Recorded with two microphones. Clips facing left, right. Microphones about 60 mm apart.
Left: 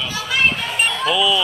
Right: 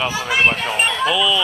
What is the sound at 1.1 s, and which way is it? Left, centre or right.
Speech, centre.